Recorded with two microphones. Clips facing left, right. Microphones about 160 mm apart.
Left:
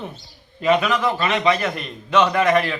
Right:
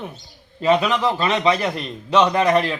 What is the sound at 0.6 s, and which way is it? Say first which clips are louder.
A man's voice: right 1 dB; 35° right (ahead or behind).